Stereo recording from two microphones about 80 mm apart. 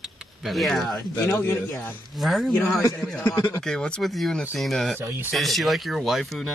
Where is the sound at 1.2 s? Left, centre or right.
Left.